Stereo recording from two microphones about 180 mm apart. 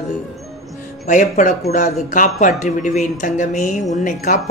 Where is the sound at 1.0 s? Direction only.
45° left (ahead or behind).